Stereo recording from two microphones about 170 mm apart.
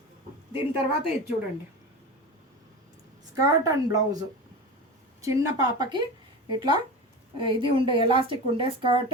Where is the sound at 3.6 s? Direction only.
20° right (ahead or behind).